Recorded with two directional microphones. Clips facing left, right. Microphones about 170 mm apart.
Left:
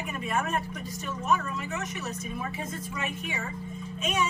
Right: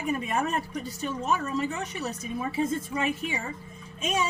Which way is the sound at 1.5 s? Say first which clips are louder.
Right 5 dB; 35° right (ahead or behind).